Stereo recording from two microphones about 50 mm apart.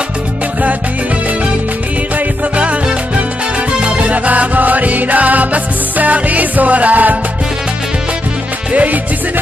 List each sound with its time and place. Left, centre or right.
2.1 s music: right
3.8 s music: right
8.7 s music: right